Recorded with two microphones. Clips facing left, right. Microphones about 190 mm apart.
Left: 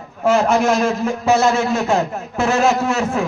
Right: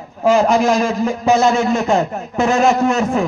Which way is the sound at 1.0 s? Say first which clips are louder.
Right 2 dB; 5° left (ahead or behind).